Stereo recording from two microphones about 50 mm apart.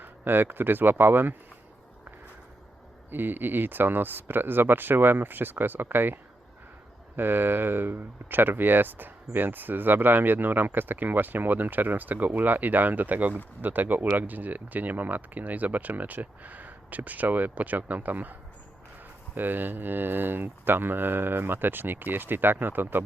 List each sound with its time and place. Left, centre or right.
0.0 s speech: right
3.1 s speech: right
7.2 s speech: right